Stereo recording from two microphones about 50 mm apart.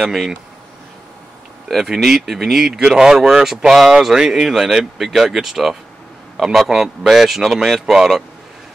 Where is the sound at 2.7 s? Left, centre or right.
Centre.